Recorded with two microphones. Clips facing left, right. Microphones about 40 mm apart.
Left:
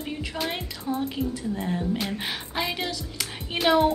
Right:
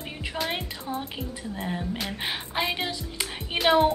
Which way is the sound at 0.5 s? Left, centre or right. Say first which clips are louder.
Left 1 dB; centre.